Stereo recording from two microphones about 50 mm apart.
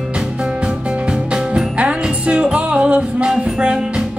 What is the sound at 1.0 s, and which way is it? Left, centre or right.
Music, centre.